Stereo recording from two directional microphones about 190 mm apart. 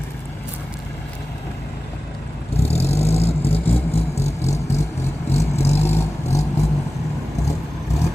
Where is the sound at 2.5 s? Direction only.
35° left (ahead or behind).